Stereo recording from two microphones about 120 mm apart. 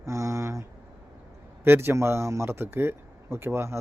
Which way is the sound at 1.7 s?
20° right (ahead or behind).